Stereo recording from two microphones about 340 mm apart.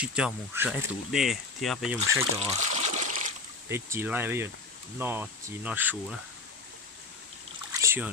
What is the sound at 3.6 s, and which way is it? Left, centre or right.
Speech, centre.